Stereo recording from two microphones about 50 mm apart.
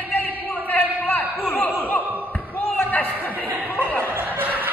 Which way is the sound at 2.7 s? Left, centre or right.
Left.